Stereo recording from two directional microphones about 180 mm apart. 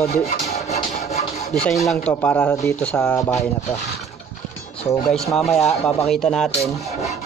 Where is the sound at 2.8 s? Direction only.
5° left (ahead or behind).